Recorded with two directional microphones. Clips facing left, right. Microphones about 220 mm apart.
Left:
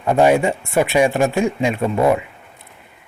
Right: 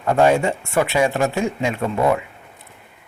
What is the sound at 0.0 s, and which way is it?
A man's voice, 15° left (ahead or behind).